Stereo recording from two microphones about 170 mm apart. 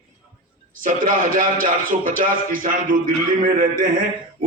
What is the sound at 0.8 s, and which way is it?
A man's voice, 50° right (ahead or behind).